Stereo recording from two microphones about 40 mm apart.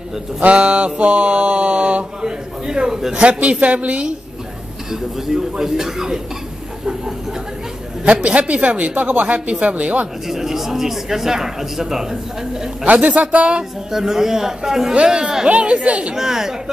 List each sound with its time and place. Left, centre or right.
0.5 s speech: right
2.2 s speech: centre
3.2 s speech: right
5.2 s speech: centre
8.0 s speech: right
10.2 s speech: centre
12.8 s speech: right
13.9 s speech: centre; by 16.2 s right
16.2 s speech: centre